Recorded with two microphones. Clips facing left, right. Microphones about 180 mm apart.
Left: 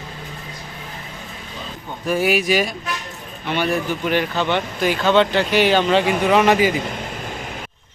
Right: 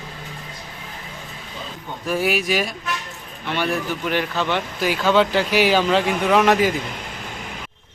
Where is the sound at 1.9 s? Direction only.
Centre (ahead or behind).